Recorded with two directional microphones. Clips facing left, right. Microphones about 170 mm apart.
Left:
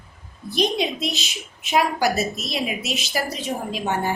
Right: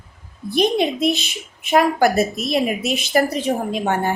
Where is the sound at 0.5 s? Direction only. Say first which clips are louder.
Right 5 dB; 55° right (ahead or behind).